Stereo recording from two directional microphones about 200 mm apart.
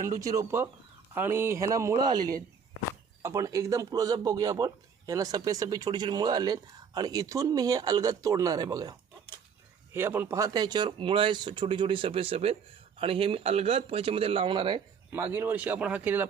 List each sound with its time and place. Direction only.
0.0 s a man's voice: 15° right (ahead or behind)
15.1 s a man's voice: 10° right (ahead or behind)